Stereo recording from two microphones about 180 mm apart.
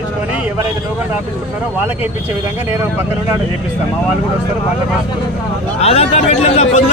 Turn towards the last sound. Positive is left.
turn(degrees=35)  # may be behind; listen again after turning